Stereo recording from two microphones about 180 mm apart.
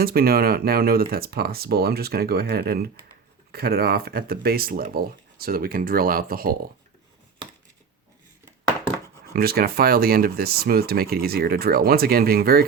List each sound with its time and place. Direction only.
0.0 s speech: 55° right (ahead or behind)
9.3 s speech: 55° right (ahead or behind)